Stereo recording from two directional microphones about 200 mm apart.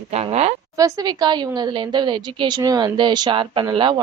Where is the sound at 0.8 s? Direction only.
20° right (ahead or behind).